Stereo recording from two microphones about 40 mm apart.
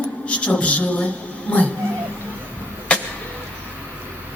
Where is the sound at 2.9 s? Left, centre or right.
Left.